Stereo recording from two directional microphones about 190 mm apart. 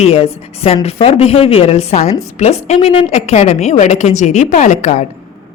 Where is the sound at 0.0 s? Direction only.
30° left (ahead or behind).